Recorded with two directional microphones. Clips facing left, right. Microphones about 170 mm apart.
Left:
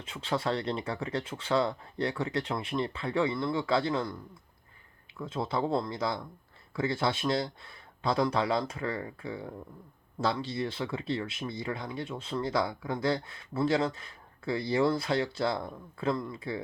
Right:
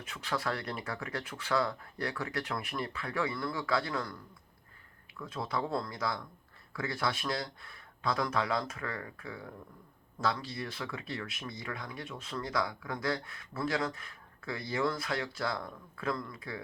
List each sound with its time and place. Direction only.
0.0 s speech: 25° left (ahead or behind)